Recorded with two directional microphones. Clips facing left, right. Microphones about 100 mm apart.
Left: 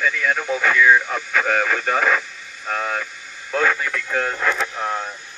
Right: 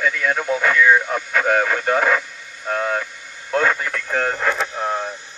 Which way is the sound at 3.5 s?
45° right (ahead or behind).